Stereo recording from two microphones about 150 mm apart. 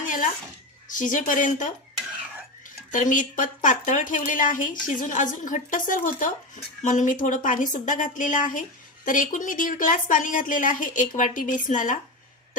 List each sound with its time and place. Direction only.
0.0 s a sound: 60° left (ahead or behind)
0.9 s a woman's voice: 60° left (ahead or behind)
2.9 s a woman's voice: 60° left (ahead or behind)